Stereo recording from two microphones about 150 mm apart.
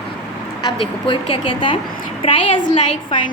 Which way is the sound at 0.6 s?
35° left (ahead or behind).